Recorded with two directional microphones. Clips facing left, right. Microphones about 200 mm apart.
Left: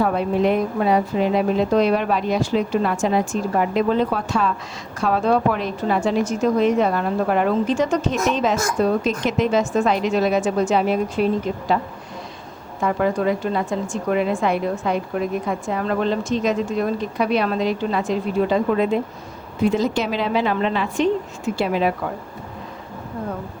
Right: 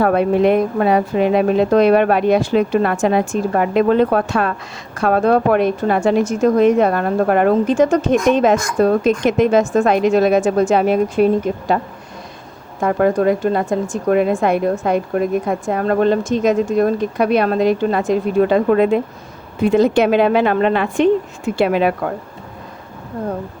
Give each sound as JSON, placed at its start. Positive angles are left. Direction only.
{"t": 0.0, "sound": "a woman's voice", "side_deg": -60}
{"t": 12.8, "sound": "a woman's voice", "side_deg": -50}